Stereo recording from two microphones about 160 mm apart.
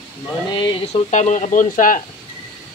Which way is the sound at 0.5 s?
30° left (ahead or behind).